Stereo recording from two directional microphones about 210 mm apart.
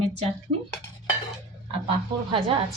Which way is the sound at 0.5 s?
45° right (ahead or behind).